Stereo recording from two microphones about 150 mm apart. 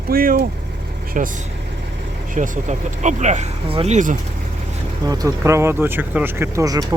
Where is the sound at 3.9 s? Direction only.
60° right (ahead or behind).